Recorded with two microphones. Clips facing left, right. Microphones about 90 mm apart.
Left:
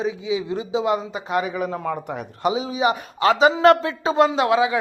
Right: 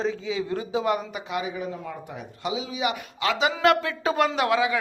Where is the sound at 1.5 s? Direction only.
80° left.